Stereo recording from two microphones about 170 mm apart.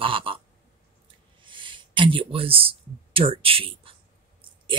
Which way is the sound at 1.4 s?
30° right (ahead or behind).